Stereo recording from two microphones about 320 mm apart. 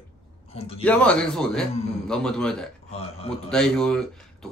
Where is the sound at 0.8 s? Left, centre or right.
Centre.